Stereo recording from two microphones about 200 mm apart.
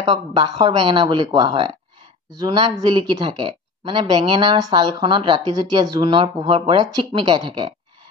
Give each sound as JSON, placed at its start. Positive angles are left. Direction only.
{"t": 0.0, "sound": "speech", "side_deg": -20}